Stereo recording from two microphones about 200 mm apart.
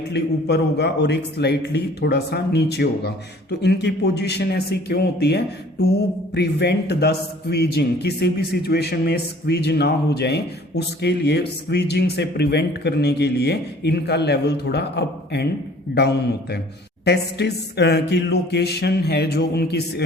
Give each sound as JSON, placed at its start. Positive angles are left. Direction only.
{"t": 0.1, "sound": "a man's voice", "side_deg": 55}